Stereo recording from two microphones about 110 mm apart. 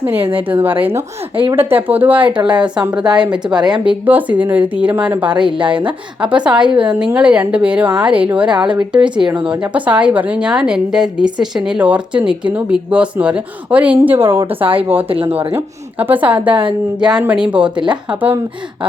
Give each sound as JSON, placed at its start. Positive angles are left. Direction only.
{"t": 0.3, "sound": "a woman's voice", "side_deg": -15}
{"t": 2.2, "sound": "speech", "side_deg": -45}
{"t": 3.2, "sound": "a woman's voice", "side_deg": -10}
{"t": 3.6, "sound": "speech", "side_deg": -45}
{"t": 4.0, "sound": "a woman's voice", "side_deg": -15}
{"t": 5.3, "sound": "speech", "side_deg": -45}
{"t": 6.2, "sound": "a woman's voice", "side_deg": -10}
{"t": 9.0, "sound": "speech", "side_deg": -45}
{"t": 9.5, "sound": "a woman's voice", "side_deg": -15}
{"t": 14.6, "sound": "speech", "side_deg": -55}
{"t": 15.5, "sound": "a woman's voice", "side_deg": -15}